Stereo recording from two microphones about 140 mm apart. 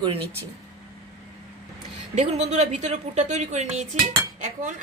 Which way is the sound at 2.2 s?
55° right (ahead or behind).